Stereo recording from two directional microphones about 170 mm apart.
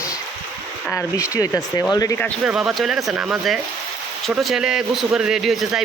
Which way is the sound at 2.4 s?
5° right (ahead or behind).